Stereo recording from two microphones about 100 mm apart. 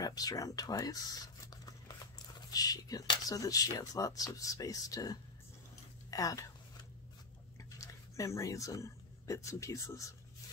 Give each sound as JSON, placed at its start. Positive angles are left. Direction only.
{"t": 0.0, "sound": "speech", "side_deg": 40}
{"t": 7.7, "sound": "speech", "side_deg": 35}